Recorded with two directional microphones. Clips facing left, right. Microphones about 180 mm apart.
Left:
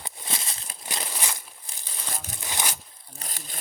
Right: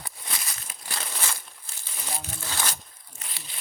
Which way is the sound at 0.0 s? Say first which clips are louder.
Left 2 dB; 25° left (ahead or behind).